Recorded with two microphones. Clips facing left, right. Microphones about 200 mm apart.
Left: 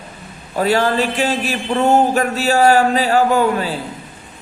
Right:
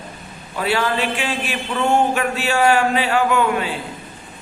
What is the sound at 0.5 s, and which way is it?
A man's voice, 40° left (ahead or behind).